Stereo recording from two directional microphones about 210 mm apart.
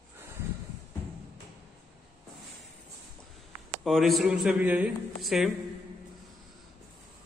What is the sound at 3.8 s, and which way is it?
Speech, centre (ahead or behind).